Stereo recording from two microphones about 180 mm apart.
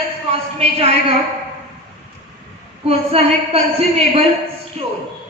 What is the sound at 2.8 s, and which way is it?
A woman's voice, 35° right (ahead or behind).